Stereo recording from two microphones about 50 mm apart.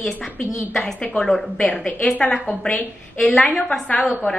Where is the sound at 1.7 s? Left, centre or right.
Left.